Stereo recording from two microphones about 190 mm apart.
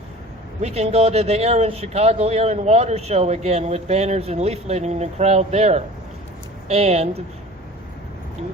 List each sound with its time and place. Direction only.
0.6 s speech: 35° right (ahead or behind)